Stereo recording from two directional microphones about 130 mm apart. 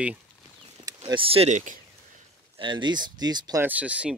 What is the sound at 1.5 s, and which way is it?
Speech, 75° right (ahead or behind).